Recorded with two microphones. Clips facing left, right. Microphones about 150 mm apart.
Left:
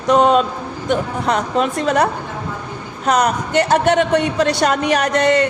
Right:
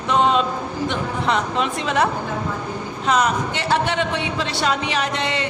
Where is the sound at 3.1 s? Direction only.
45° left (ahead or behind).